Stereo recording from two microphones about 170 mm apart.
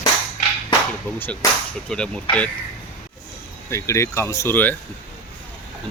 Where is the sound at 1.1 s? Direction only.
10° left (ahead or behind).